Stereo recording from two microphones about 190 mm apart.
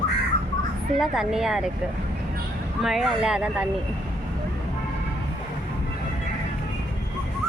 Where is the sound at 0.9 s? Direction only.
Centre (ahead or behind).